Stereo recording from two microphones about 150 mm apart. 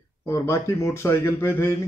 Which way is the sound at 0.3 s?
20° left (ahead or behind).